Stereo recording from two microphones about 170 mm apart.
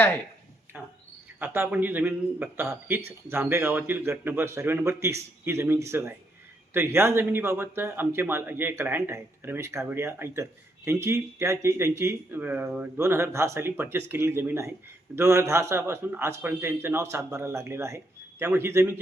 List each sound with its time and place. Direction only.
0.7 s speech: 5° right (ahead or behind)